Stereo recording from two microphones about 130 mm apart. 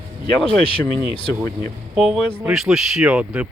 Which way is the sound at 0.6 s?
45° left (ahead or behind).